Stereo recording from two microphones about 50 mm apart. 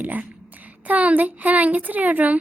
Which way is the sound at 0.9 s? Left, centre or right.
Right.